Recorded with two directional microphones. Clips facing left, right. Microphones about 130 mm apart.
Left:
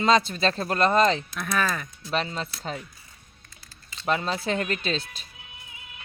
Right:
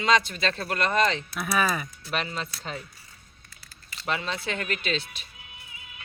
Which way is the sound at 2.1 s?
30° left (ahead or behind).